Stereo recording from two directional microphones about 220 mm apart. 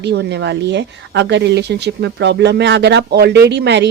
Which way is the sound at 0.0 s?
50° right (ahead or behind).